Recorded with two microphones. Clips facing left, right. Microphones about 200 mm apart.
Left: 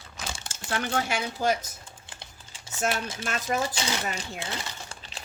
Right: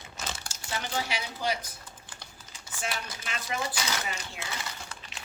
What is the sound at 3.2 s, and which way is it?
Speech, 45° left (ahead or behind).